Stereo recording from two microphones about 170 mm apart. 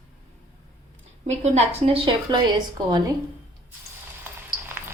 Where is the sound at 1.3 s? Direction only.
40° right (ahead or behind).